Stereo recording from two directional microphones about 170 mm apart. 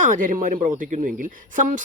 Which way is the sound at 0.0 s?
50° right (ahead or behind).